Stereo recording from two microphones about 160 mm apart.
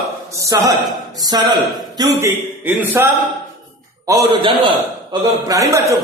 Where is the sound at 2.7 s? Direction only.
15° right (ahead or behind).